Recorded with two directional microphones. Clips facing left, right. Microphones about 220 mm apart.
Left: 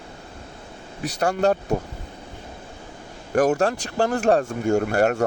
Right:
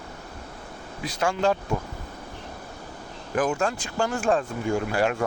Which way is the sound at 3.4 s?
40° left (ahead or behind).